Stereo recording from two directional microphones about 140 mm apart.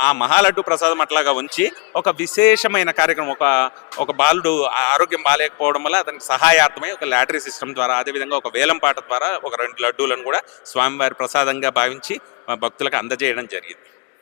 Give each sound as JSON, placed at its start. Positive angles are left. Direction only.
{"t": 0.0, "sound": "a man's voice", "side_deg": 10}